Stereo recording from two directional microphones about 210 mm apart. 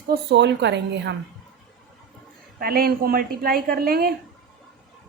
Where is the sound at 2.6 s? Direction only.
45° right (ahead or behind).